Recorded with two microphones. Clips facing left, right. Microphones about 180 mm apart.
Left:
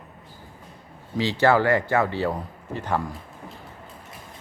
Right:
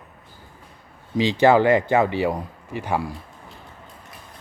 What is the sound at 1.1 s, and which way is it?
Speech, 15° right (ahead or behind).